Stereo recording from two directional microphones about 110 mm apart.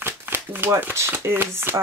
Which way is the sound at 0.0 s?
20° right (ahead or behind).